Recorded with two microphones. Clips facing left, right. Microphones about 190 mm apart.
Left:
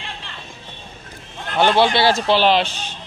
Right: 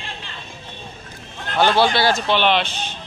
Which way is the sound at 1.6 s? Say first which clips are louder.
Left 1 dB; 20° left (ahead or behind).